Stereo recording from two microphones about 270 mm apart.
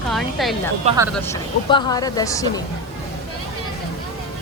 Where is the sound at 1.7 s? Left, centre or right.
Centre.